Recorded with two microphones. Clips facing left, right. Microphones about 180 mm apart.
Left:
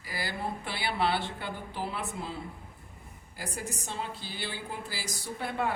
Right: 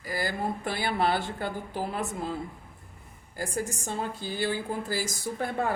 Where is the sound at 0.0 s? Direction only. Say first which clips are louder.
Right 5 dB; 45° right (ahead or behind).